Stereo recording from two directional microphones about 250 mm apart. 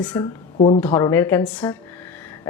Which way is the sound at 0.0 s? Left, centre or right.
Centre.